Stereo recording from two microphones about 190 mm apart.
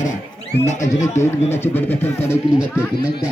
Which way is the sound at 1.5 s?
10° left (ahead or behind).